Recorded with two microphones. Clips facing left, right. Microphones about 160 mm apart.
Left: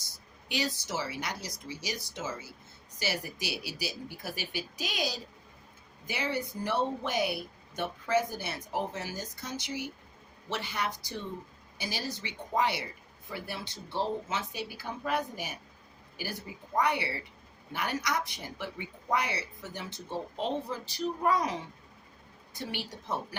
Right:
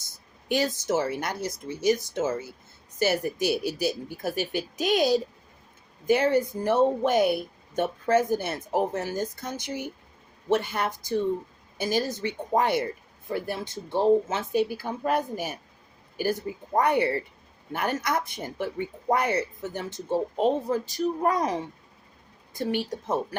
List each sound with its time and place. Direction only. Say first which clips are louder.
0.4 s speech: right 8 dB; 50° right (ahead or behind)
16.7 s speech: right 7 dB; 50° right (ahead or behind)
22.5 s speech: right 10 dB; 45° right (ahead or behind)